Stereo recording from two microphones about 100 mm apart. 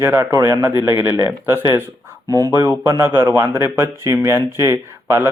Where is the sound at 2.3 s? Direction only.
35° right (ahead or behind).